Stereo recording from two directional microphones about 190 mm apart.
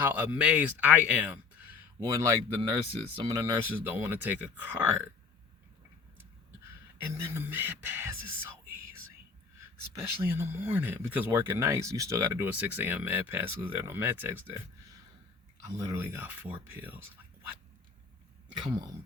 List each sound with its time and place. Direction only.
0.0 s speech: 10° right (ahead or behind)
7.1 s speech: 15° right (ahead or behind)
10.2 s speech: 10° right (ahead or behind)
15.8 s speech: 15° right (ahead or behind)
18.6 s speech: 25° right (ahead or behind)